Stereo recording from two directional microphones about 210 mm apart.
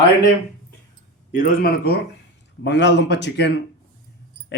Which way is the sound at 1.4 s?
45° left (ahead or behind).